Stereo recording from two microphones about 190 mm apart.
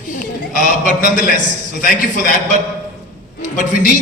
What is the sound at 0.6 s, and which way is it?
Speech, 40° right (ahead or behind).